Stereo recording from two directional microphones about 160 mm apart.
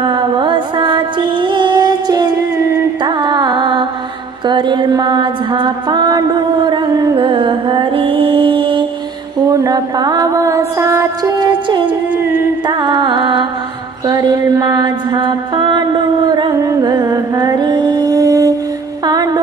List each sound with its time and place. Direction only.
0.0 s music: 30° right (ahead or behind)
4.5 s mantra: 30° right (ahead or behind)
9.5 s music: 20° right (ahead or behind)
14.0 s mantra: 25° right (ahead or behind)
19.0 s a sound: 25° right (ahead or behind)